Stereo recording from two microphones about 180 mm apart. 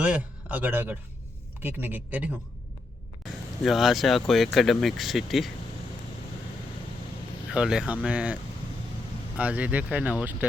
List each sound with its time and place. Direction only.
0.0 s a man's voice: 5° right (ahead or behind)
3.6 s speech: centre (ahead or behind)
7.5 s speech: 5° right (ahead or behind)